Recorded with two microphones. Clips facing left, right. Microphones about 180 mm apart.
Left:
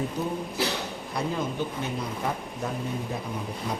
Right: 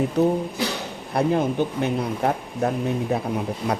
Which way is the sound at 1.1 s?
60° right (ahead or behind).